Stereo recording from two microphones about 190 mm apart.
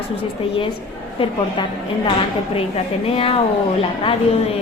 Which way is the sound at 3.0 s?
30° left (ahead or behind).